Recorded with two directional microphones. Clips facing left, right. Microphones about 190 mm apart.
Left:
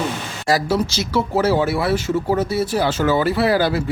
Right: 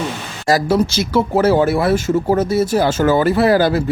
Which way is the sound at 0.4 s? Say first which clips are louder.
Right 4 dB; 50° right (ahead or behind).